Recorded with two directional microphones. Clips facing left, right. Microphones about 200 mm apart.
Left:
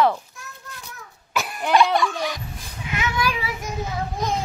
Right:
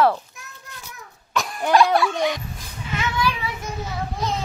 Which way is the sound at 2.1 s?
20° right (ahead or behind).